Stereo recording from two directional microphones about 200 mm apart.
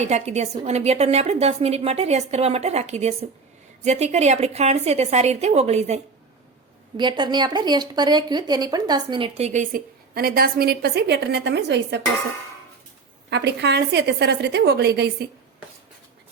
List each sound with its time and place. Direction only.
0.0 s a woman's voice: 35° right (ahead or behind)
6.9 s speech: 20° right (ahead or behind); by 11.9 s 55° right (ahead or behind)
13.3 s a woman's voice: 60° right (ahead or behind)